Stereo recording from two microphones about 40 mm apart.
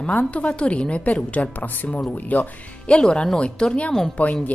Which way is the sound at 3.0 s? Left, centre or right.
Left.